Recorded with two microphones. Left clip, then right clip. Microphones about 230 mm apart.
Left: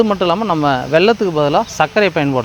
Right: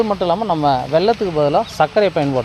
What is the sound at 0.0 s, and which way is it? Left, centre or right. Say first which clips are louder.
Speech: left 2 dB; left.